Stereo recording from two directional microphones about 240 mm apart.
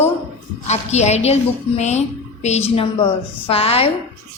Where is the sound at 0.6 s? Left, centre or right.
Left.